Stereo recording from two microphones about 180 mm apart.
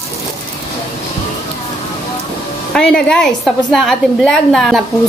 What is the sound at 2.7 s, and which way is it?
A woman's voice, 5° left (ahead or behind).